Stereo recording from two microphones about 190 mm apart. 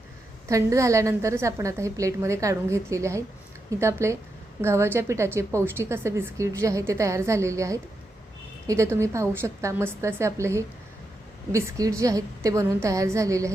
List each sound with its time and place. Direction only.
0.4 s a woman's voice: 15° right (ahead or behind)